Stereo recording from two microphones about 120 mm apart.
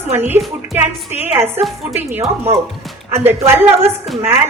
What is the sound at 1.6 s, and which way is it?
A woman's voice, 15° right (ahead or behind).